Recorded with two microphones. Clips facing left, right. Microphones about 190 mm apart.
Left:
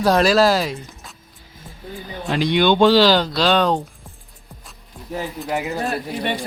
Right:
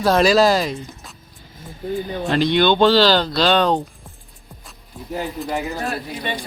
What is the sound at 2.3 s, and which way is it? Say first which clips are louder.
Speech: even; 10° left (ahead or behind).